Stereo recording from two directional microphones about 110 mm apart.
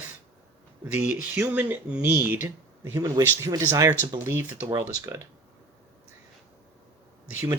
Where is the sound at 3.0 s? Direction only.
35° right (ahead or behind).